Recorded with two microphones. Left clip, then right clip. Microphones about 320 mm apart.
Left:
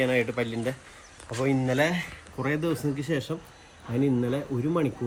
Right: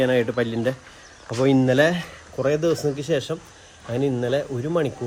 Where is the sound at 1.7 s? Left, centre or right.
Centre.